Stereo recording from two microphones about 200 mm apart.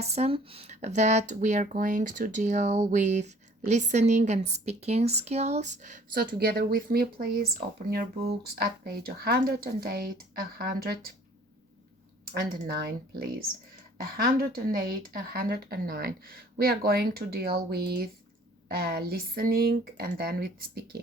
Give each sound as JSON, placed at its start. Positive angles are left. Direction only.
{"t": 0.0, "sound": "a woman's voice", "side_deg": -30}
{"t": 12.2, "sound": "a woman's voice", "side_deg": -50}